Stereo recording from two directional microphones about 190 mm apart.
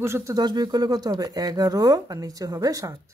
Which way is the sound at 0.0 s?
15° right (ahead or behind).